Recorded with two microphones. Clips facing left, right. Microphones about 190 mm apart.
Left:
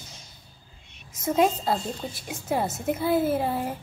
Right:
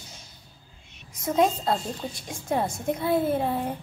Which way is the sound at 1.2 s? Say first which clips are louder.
Even; centre (ahead or behind).